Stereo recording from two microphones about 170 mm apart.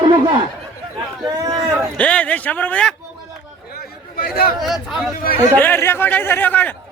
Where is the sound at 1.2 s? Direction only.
25° right (ahead or behind).